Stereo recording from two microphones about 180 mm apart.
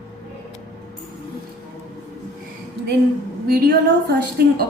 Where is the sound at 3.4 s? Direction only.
60° right (ahead or behind).